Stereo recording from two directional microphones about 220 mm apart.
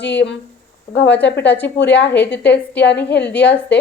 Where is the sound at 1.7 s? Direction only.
55° left (ahead or behind).